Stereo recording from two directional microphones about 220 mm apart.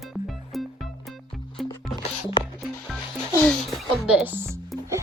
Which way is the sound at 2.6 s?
Centre (ahead or behind).